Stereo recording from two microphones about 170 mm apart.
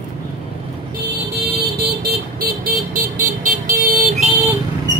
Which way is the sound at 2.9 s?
55° right (ahead or behind).